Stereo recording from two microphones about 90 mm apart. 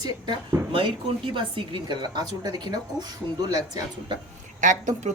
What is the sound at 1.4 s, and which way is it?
A woman's voice, 60° right (ahead or behind).